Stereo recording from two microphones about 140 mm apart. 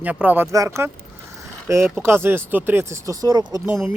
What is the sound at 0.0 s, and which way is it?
Speech, 10° right (ahead or behind).